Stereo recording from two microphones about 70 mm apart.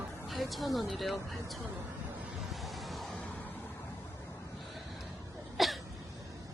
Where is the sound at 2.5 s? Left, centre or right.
Centre.